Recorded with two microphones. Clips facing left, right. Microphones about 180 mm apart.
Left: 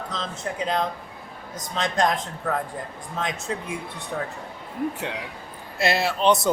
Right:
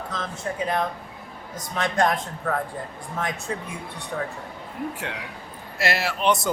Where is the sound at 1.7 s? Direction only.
20° left (ahead or behind).